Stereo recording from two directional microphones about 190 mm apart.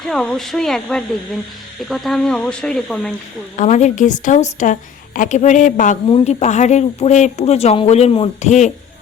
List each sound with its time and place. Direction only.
0.0 s speech: centre (ahead or behind)
3.6 s speech: 40° left (ahead or behind)